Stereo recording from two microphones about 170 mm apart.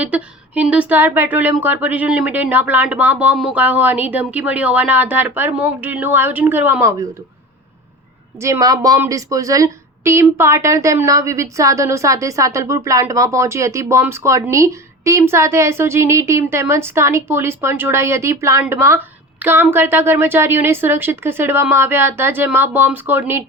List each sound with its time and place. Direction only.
0.0 s a woman's voice: 10° right (ahead or behind)
8.4 s a woman's voice: 15° right (ahead or behind)